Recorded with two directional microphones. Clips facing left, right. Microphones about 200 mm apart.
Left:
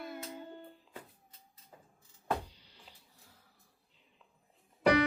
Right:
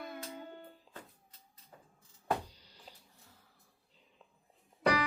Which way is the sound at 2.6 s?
40° right (ahead or behind).